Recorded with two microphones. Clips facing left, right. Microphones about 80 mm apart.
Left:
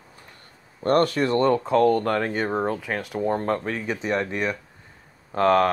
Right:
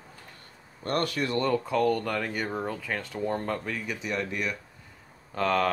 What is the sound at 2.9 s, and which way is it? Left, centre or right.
Speech, centre.